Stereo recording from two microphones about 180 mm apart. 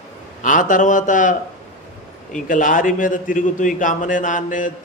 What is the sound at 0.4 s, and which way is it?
Speech, 45° left (ahead or behind).